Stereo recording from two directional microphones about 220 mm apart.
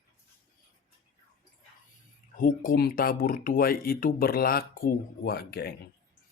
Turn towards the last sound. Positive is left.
turn(degrees=45)  # may be behind; listen again after turning